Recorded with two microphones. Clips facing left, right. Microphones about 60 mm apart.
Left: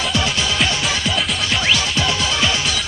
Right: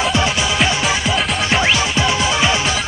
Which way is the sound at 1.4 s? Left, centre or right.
Right.